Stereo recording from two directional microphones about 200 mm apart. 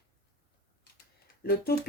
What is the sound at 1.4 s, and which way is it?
Speech, 50° left (ahead or behind).